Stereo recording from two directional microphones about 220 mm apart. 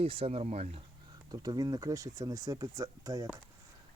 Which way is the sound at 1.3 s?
20° right (ahead or behind).